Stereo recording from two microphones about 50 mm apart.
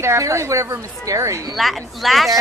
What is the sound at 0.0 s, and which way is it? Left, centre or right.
A woman's voice, right.